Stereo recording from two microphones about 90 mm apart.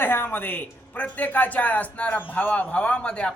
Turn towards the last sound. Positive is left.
turn(degrees=10)  # may be behind; listen again after turning